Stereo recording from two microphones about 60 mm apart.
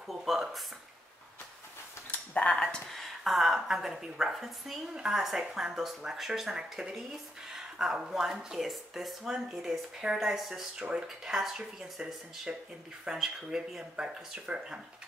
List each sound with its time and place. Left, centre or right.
0.1 s speech: centre
2.0 s a sound: left
2.5 s speech: centre
10.8 s speech: centre